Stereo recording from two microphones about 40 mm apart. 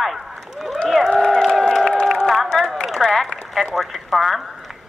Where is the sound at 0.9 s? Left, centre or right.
Centre.